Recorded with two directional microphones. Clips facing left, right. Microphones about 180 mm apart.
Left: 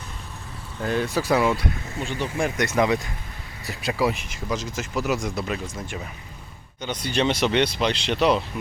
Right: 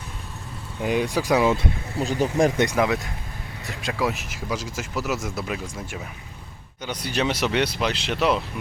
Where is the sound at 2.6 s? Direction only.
5° right (ahead or behind).